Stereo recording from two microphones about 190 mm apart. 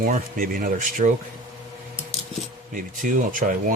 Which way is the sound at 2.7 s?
45° right (ahead or behind).